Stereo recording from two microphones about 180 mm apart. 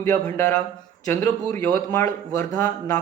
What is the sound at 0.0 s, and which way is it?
Speech, 15° left (ahead or behind).